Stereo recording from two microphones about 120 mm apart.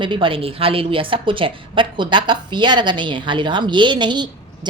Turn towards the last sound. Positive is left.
turn(degrees=-40)  # may be behind; listen again after turning